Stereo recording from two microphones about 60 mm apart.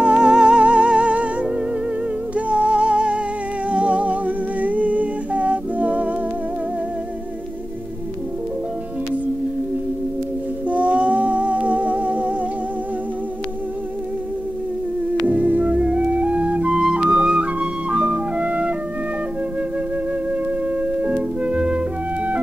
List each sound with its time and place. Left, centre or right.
0.0 s music: centre
3.7 s humming: right
10.7 s humming: right
15.2 s music: right
16.7 s flute: centre
21.0 s music: centre